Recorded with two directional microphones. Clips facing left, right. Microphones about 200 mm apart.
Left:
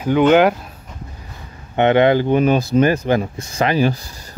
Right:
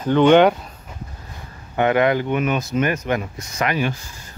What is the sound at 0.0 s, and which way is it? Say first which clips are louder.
Speech: even; 10° left (ahead or behind).